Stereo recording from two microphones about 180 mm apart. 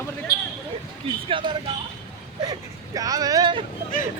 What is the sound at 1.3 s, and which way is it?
Speech, 30° right (ahead or behind).